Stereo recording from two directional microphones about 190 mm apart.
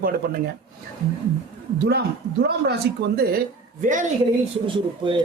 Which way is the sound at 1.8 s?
60° right (ahead or behind).